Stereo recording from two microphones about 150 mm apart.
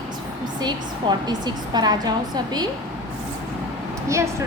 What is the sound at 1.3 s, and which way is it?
A woman's voice, 25° right (ahead or behind).